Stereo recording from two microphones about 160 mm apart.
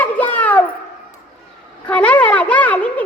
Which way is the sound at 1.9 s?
10° left (ahead or behind).